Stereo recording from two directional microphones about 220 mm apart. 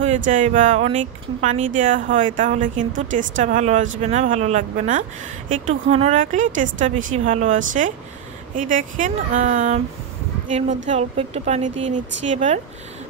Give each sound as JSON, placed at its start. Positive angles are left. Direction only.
{"t": 0.0, "sound": "speech", "side_deg": -35}